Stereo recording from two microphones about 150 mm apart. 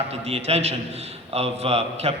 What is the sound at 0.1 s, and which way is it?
A man's voice, 45° right (ahead or behind).